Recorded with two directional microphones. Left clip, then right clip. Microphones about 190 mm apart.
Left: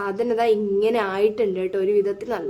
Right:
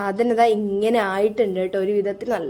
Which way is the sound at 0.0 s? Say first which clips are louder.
Right 3 dB; 20° right (ahead or behind).